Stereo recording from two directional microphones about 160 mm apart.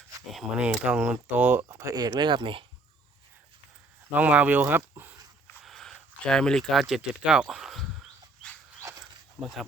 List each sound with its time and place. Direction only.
0.3 s speech: 5° right (ahead or behind); by 2.6 s 30° right (ahead or behind)
4.1 s speech: 10° right (ahead or behind)
5.6 s a sound: centre (ahead or behind)
9.4 s speech: centre (ahead or behind)